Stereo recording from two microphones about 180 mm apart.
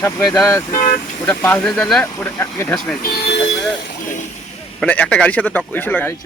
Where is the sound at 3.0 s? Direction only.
55° left (ahead or behind).